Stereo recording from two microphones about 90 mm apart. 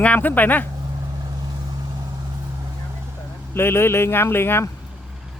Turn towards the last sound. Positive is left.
turn(degrees=25)  # may be behind; listen again after turning